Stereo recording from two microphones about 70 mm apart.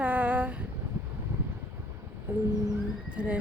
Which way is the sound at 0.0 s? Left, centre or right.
Right.